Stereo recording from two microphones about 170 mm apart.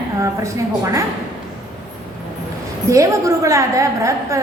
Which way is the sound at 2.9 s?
20° right (ahead or behind).